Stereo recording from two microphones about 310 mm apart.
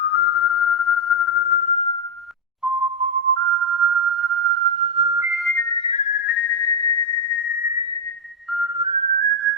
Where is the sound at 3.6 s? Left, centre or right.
Right.